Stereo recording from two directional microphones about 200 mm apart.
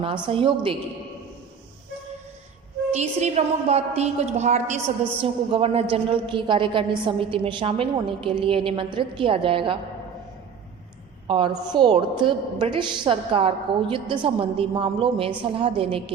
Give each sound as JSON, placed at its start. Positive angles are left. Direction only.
{"t": 0.0, "sound": "a woman's voice", "side_deg": -25}
{"t": 2.9, "sound": "a woman's voice", "side_deg": -35}
{"t": 11.3, "sound": "a woman's voice", "side_deg": -25}